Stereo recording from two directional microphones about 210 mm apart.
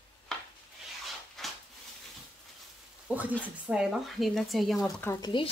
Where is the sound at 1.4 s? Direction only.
Centre (ahead or behind).